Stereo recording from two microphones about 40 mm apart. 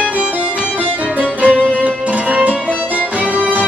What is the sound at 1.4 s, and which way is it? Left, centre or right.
Music, right.